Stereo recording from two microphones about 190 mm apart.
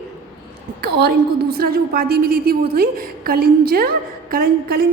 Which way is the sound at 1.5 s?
50° right (ahead or behind).